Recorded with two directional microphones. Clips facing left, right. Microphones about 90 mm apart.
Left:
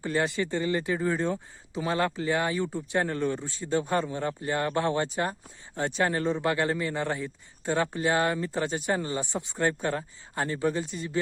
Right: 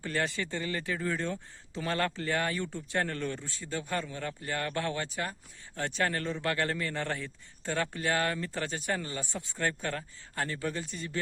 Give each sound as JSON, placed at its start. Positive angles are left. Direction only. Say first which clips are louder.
{"t": 0.3, "sound": "speech", "louder": "left 7 dB", "side_deg": 25}